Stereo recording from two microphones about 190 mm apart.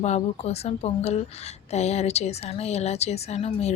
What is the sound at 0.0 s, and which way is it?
A woman's voice, 35° left (ahead or behind).